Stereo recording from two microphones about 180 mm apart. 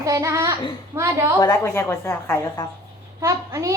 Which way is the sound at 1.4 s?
15° left (ahead or behind).